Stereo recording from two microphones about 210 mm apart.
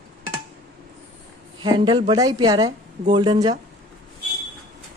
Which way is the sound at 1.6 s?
20° right (ahead or behind).